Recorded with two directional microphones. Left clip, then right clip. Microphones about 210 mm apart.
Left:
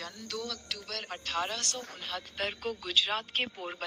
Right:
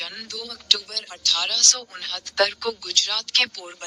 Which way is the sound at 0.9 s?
Centre (ahead or behind).